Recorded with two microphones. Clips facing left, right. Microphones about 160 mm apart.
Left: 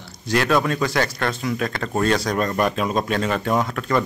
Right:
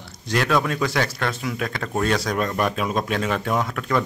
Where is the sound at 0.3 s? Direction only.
Centre (ahead or behind).